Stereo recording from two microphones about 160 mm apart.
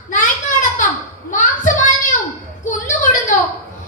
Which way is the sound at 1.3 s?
50° left (ahead or behind).